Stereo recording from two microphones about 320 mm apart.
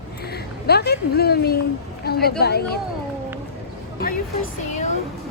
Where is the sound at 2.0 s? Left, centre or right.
Left.